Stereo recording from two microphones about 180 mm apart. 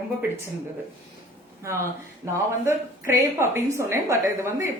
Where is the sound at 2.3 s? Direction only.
15° right (ahead or behind).